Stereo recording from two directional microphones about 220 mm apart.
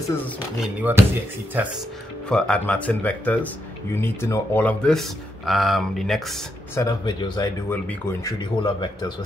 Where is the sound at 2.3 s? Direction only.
5° left (ahead or behind).